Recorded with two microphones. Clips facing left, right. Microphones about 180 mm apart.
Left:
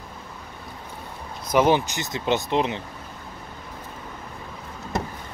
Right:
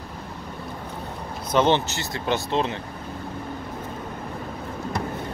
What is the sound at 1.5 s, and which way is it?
Speech, 10° left (ahead or behind).